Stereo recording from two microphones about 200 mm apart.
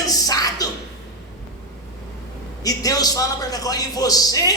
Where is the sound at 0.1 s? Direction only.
20° left (ahead or behind).